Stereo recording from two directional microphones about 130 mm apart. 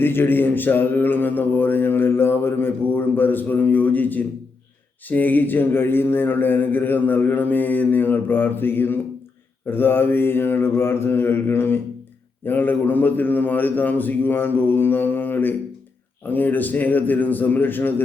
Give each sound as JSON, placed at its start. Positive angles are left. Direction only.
{"t": 0.0, "sound": "mantra", "side_deg": 15}